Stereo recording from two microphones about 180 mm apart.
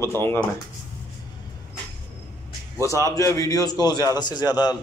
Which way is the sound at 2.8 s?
15° left (ahead or behind).